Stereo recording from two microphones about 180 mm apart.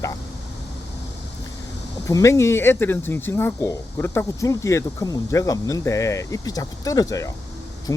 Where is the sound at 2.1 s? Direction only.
15° left (ahead or behind).